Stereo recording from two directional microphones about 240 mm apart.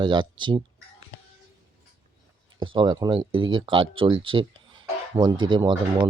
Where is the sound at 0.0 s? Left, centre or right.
Centre.